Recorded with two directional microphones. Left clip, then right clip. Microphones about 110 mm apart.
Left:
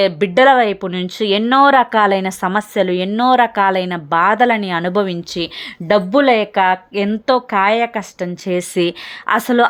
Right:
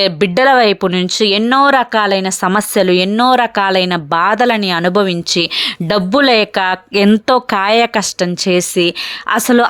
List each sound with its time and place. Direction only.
0.0 s speech: 30° right (ahead or behind); by 2.3 s 5° right (ahead or behind)
2.4 s speech: 30° right (ahead or behind)
5.3 s speech: 45° right (ahead or behind)
6.9 s speech: 60° right (ahead or behind)
7.5 s speech: 40° right (ahead or behind)